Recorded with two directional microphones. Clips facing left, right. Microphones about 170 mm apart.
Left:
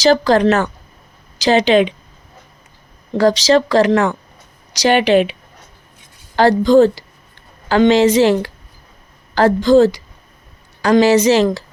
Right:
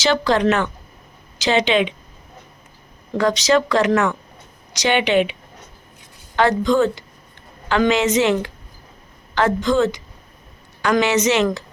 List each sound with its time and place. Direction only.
0.0 s speech: 40° left (ahead or behind)
3.2 s speech: 35° left (ahead or behind)